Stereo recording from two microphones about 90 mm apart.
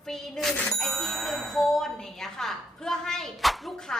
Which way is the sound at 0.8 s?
5° left (ahead or behind).